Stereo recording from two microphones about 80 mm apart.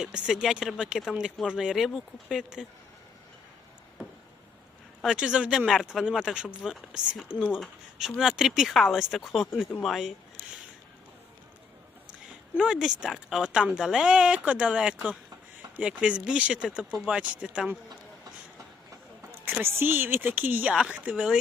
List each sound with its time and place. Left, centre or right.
0.0 s speech: centre
5.0 s speech: centre
12.5 s speech: centre
19.6 s speech: right